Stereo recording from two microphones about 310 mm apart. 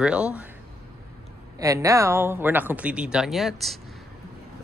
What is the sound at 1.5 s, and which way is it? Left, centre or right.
Speech, centre.